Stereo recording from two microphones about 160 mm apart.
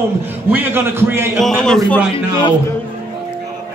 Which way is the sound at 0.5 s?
10° right (ahead or behind).